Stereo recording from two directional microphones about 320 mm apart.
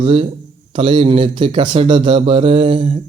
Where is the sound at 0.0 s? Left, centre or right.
Centre.